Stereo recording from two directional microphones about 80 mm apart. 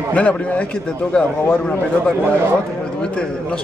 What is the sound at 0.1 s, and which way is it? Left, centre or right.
Speech, centre.